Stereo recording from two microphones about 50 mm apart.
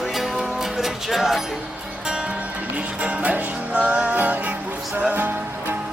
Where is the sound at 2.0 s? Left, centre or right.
Centre.